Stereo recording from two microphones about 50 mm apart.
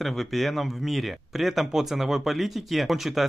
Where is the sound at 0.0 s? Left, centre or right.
Centre.